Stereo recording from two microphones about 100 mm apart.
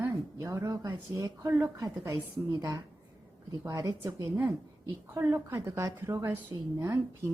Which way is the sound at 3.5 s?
35° right (ahead or behind).